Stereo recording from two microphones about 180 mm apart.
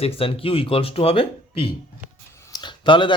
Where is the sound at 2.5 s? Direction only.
25° left (ahead or behind).